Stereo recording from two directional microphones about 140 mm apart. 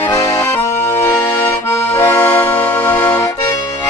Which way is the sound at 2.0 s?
15° left (ahead or behind).